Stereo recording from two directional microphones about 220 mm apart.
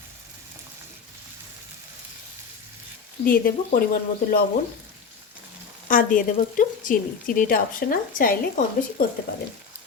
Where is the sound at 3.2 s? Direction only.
40° left (ahead or behind).